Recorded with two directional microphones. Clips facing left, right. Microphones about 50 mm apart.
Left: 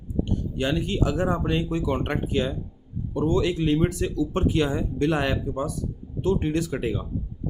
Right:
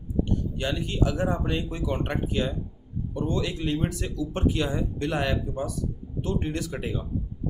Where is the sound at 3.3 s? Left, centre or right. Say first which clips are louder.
Left 6 dB; left.